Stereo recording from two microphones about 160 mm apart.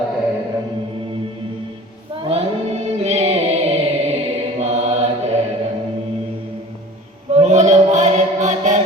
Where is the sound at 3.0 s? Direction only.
40° right (ahead or behind).